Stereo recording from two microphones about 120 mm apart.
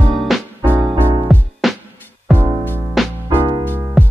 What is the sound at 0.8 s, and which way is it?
Music, 40° right (ahead or behind).